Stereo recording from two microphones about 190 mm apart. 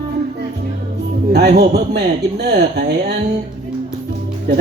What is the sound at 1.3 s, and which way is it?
Speech, 60° right (ahead or behind).